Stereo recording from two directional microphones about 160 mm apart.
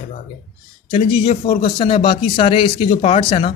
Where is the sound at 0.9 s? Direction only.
35° left (ahead or behind).